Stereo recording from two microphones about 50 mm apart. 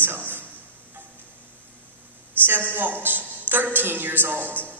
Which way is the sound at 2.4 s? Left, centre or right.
Right.